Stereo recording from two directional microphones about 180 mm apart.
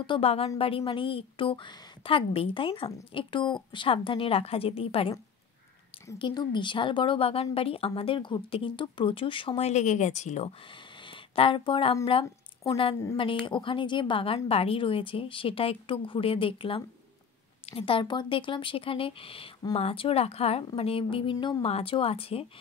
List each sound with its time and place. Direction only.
0.0 s a woman's voice: 30° left (ahead or behind)
6.1 s a woman's voice: 25° left (ahead or behind)
10.7 s a woman's voice: 30° left (ahead or behind)